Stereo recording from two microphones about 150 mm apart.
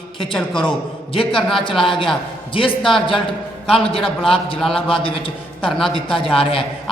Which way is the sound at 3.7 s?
35° left (ahead or behind).